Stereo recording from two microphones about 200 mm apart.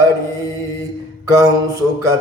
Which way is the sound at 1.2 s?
15° right (ahead or behind).